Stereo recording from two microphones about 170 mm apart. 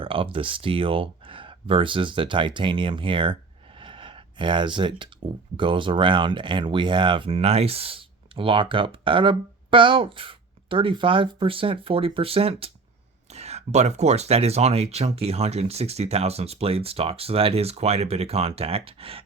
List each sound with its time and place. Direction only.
0.0 s speech: 30° right (ahead or behind)
3.8 s a sound: 30° right (ahead or behind)
5.5 s speech: 30° right (ahead or behind)